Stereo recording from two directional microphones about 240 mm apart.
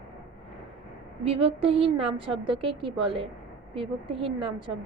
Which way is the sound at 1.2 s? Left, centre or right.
Right.